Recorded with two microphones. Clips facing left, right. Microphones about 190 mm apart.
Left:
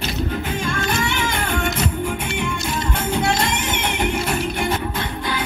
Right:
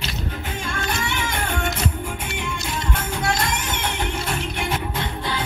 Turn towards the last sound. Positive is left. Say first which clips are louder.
# left 4 dB
turn(degrees=15)  # may be behind; listen again after turning